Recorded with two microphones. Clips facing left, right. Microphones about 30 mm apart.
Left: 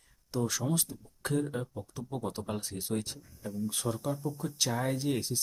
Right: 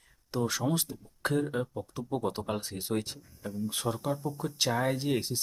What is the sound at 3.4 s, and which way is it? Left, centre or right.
Speech, centre.